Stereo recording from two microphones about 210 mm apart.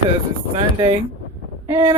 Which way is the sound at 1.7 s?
10° right (ahead or behind).